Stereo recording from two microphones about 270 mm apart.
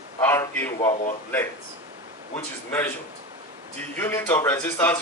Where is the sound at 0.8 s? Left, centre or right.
Left.